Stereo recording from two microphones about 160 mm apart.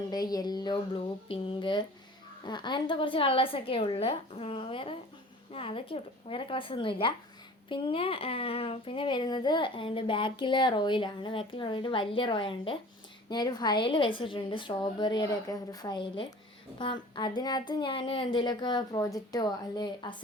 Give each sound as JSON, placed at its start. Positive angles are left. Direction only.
{"t": 0.1, "sound": "a child's voice", "side_deg": 25}